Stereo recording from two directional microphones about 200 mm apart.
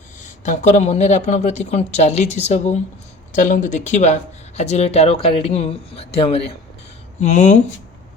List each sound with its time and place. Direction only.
0.2 s speech: 35° left (ahead or behind)